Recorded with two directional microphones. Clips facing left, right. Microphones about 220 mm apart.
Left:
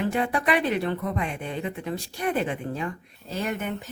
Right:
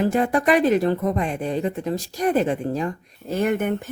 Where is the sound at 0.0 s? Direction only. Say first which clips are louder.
Right 6 dB; 45° right (ahead or behind).